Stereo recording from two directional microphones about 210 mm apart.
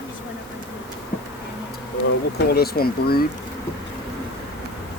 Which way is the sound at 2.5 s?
45° left (ahead or behind).